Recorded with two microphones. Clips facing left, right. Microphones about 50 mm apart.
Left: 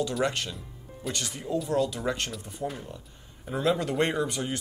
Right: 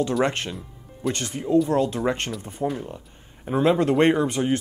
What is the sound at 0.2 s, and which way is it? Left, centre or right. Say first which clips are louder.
Speech: right 5 dB; right.